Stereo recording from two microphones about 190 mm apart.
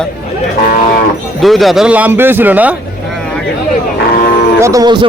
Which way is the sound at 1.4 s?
Centre (ahead or behind).